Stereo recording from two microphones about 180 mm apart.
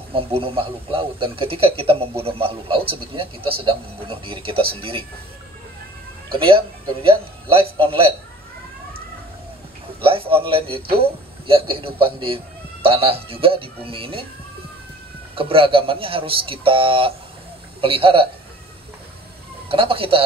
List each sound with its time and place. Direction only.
0.1 s speech: 30° right (ahead or behind)
6.3 s speech: 30° right (ahead or behind)
10.0 s a man's voice: 30° right (ahead or behind)
15.3 s a man's voice: 30° right (ahead or behind)
19.7 s speech: 30° right (ahead or behind)